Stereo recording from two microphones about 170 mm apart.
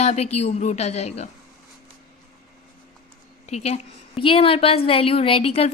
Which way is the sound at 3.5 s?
40° left (ahead or behind).